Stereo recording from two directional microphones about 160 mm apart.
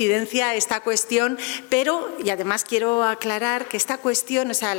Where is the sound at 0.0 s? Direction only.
10° left (ahead or behind).